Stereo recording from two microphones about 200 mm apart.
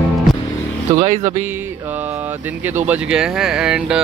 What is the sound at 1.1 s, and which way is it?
Music, 35° right (ahead or behind).